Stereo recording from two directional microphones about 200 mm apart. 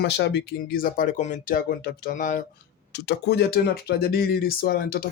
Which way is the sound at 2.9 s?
60° left (ahead or behind).